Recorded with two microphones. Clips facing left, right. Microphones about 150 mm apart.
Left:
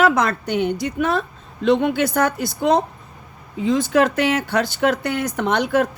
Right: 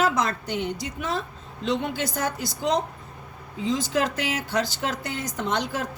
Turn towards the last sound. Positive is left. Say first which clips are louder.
# left 8 dB
turn(degrees=65)  # may be behind; listen again after turning